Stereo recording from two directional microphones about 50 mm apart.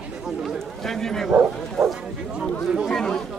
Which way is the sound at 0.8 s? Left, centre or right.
Centre.